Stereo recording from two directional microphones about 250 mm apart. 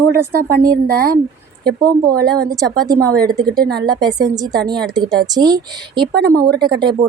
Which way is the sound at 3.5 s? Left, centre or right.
Right.